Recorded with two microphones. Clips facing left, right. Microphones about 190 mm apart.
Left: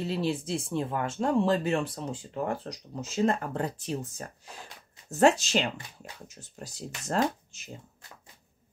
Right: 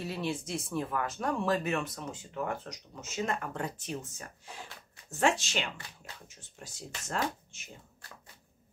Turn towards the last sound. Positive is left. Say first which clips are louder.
# left 6 dB
turn(degrees=35)  # may be behind; listen again after turning